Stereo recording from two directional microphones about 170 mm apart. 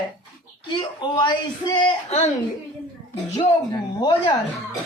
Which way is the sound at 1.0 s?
25° left (ahead or behind).